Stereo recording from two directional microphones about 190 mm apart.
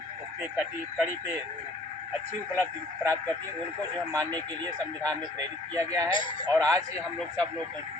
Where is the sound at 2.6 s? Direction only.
10° left (ahead or behind).